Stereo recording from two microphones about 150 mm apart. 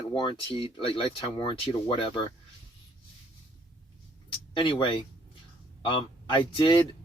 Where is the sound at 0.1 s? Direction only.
35° left (ahead or behind).